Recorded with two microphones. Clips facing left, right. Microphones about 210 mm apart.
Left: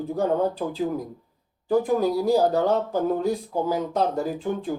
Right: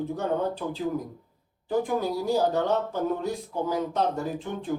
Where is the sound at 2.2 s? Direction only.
35° left (ahead or behind).